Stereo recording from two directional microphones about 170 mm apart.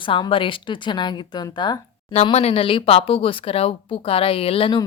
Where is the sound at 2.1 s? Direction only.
40° left (ahead or behind).